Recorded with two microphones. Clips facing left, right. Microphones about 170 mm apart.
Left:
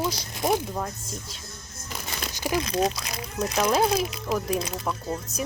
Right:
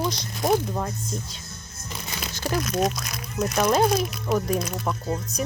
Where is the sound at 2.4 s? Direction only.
10° left (ahead or behind).